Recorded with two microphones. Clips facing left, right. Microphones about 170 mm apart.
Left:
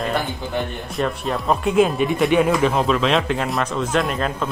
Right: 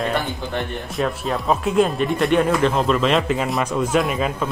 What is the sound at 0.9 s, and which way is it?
Speech, centre (ahead or behind).